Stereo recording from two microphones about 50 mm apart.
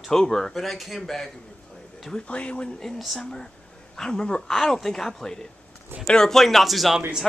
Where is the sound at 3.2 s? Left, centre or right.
Centre.